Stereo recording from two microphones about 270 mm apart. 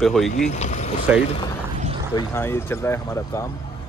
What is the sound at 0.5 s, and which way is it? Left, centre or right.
Speech, left.